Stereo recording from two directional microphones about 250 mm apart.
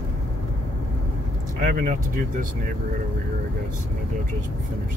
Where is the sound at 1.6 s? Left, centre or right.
Right.